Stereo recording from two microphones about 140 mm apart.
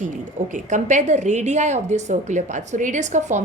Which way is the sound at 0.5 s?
60° right (ahead or behind).